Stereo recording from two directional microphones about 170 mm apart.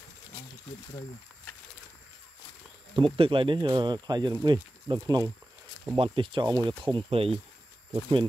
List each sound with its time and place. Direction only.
3.0 s speech: 30° right (ahead or behind)